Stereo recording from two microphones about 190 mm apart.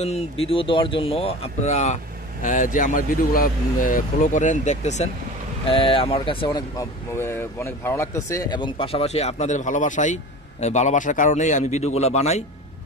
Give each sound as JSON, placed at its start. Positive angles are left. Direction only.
{"t": 0.0, "sound": "speech", "side_deg": 30}